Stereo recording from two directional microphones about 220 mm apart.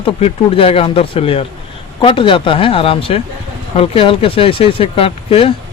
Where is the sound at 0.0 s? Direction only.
25° left (ahead or behind).